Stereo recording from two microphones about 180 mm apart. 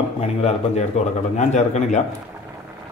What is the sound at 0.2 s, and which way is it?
A man's voice, 35° left (ahead or behind).